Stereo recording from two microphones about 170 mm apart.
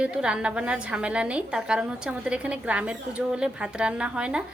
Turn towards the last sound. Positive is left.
turn(degrees=-5)  # may be behind; listen again after turning